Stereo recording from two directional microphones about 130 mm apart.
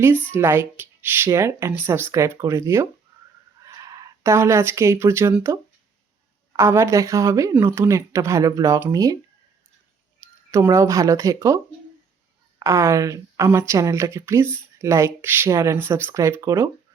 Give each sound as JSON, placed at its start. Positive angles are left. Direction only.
{"t": 0.3, "sound": "speech", "side_deg": -15}
{"t": 6.6, "sound": "speech", "side_deg": -20}
{"t": 10.5, "sound": "speech", "side_deg": -25}